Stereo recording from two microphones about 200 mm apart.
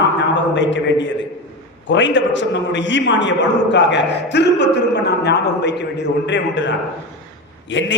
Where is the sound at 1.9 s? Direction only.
65° left (ahead or behind).